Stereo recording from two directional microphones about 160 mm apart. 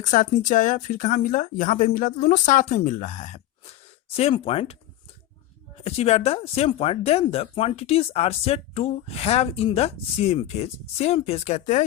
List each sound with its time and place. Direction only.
0.0 s speech: 55° left (ahead or behind)
5.8 s speech: 40° left (ahead or behind)